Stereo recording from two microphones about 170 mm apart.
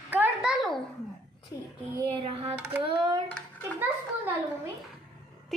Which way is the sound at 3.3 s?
5° left (ahead or behind).